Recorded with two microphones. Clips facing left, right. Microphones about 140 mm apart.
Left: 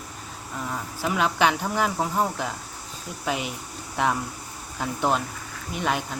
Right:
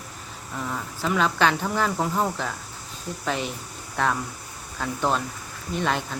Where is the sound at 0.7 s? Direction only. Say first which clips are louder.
Right 1 dB; 10° left (ahead or behind).